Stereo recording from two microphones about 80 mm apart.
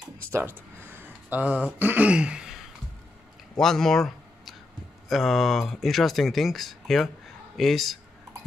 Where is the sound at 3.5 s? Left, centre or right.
Centre.